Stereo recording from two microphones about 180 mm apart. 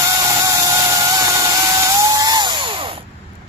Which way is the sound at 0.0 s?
20° right (ahead or behind).